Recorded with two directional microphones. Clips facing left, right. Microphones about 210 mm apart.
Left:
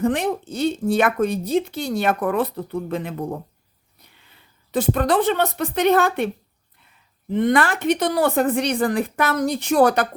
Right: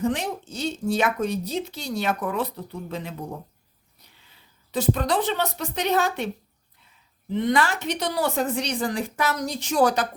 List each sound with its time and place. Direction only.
0.0 s a woman's voice: 55° left (ahead or behind)
4.7 s a woman's voice: 55° left (ahead or behind)